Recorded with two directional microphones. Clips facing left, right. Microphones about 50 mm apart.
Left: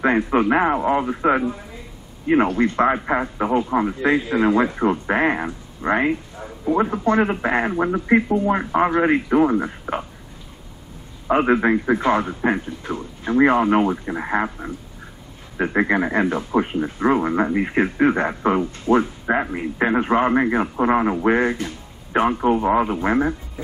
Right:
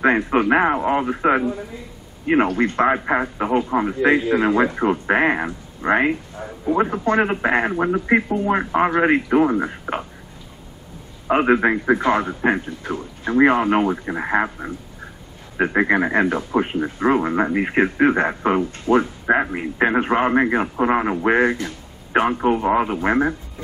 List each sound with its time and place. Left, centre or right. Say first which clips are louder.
0.3 s speech: right 1 dB; centre
2.3 s a man's voice: even; right
2.8 s speech: right 2 dB; centre
6.3 s a man's voice: even; centre
6.8 s speech: even; centre
11.2 s speech: right 1 dB; centre
15.7 s speech: right 1 dB; centre
21.6 s a sound: even; centre
22.4 s speech: even; centre